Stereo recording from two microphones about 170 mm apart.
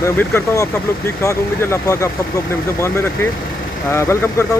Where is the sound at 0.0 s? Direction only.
15° left (ahead or behind).